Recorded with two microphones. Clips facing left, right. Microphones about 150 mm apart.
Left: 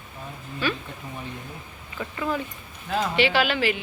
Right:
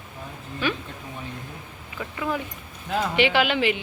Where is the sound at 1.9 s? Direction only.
5° right (ahead or behind).